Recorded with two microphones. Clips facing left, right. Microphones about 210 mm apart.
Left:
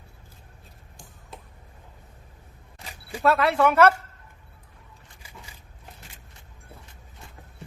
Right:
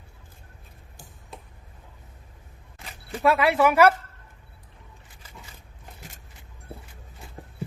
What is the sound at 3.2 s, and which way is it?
Speech, 5° right (ahead or behind).